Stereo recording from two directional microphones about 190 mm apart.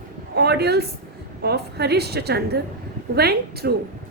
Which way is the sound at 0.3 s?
60° right (ahead or behind).